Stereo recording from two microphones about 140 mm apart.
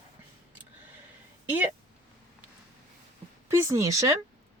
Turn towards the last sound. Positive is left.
turn(degrees=-25)  # may be behind; listen again after turning